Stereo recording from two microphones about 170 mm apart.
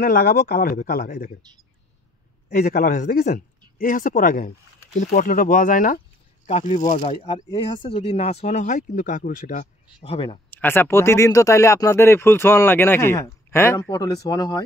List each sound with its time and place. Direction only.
0.0 s speech: 60° left (ahead or behind)
2.5 s speech: 60° left (ahead or behind)
9.9 s speech: 30° left (ahead or behind)
10.5 s speech: 10° left (ahead or behind)